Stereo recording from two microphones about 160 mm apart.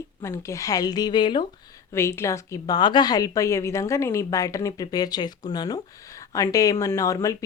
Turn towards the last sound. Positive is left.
turn(degrees=20)  # may be behind; listen again after turning